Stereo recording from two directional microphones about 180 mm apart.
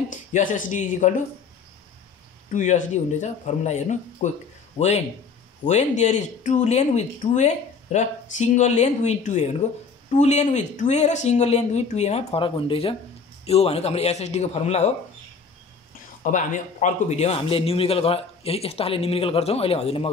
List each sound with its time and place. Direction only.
0.1 s speech: 45° left (ahead or behind)
2.5 s speech: 45° left (ahead or behind)
16.3 s speech: 45° left (ahead or behind)